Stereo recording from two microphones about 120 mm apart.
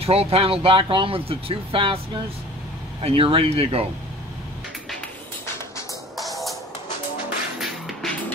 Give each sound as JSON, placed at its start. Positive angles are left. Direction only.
{"t": 0.0, "sound": "speech", "side_deg": -55}
{"t": 3.0, "sound": "speech", "side_deg": -50}
{"t": 6.1, "sound": "music", "side_deg": 0}
{"t": 7.5, "sound": "music", "side_deg": 0}